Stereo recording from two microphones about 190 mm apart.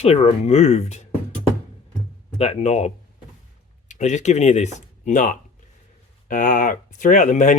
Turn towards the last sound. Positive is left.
turn(degrees=40)  # may be behind; listen again after turning